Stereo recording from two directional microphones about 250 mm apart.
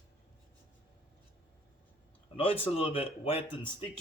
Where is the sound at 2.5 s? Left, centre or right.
Left.